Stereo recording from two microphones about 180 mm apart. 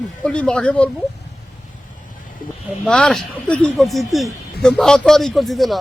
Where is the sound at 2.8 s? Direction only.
5° left (ahead or behind).